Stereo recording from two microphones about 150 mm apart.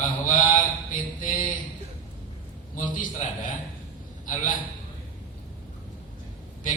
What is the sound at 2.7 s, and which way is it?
Speech, 65° left (ahead or behind).